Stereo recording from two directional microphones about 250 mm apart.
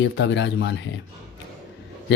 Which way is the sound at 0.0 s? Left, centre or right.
Left.